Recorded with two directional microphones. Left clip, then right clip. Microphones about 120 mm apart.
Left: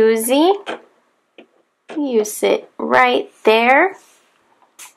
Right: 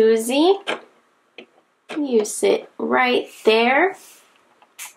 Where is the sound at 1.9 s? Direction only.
30° left (ahead or behind).